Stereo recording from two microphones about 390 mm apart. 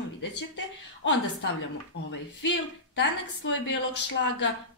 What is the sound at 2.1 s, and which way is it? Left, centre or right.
Speech, left.